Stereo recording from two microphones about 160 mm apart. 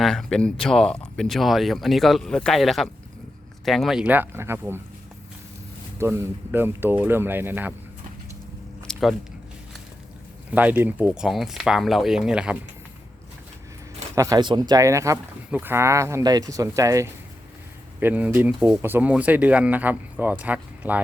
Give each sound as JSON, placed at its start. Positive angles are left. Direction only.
{"t": 0.0, "sound": "speech", "side_deg": 5}
{"t": 6.0, "sound": "speech", "side_deg": -15}
{"t": 8.9, "sound": "a sound", "side_deg": 0}
{"t": 10.5, "sound": "speech", "side_deg": -10}
{"t": 14.2, "sound": "speech", "side_deg": -25}